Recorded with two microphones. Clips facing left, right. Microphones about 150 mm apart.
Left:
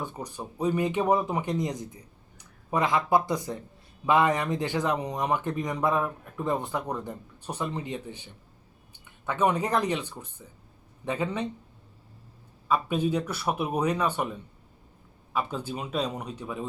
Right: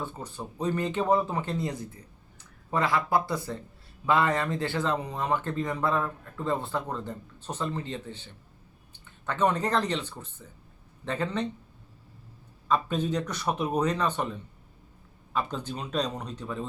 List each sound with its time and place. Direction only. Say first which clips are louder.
0.0 s a man's voice: left 1 dB; 15° left (ahead or behind)
12.6 s a man's voice: left 1 dB; 10° left (ahead or behind)